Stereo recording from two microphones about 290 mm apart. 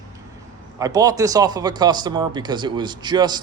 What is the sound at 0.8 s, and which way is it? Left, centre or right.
A man's voice, centre.